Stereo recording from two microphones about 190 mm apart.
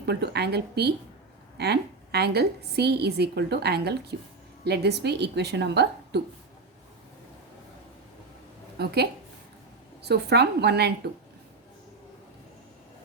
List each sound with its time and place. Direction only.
0.0 s a woman's voice: 60° right (ahead or behind)
8.8 s a woman's voice: 60° right (ahead or behind)